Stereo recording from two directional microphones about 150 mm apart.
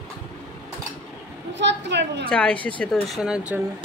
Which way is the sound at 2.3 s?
10° left (ahead or behind).